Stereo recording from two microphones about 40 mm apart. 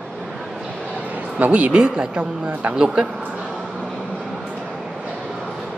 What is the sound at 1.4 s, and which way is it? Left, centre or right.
Speech, right.